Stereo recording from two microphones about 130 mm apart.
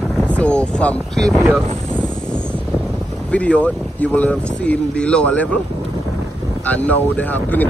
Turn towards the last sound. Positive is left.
turn(degrees=15)  # may be behind; listen again after turning